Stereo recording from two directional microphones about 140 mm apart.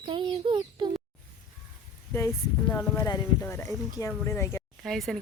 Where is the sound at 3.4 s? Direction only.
15° left (ahead or behind).